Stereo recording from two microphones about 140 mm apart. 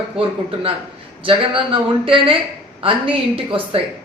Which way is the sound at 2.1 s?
40° right (ahead or behind).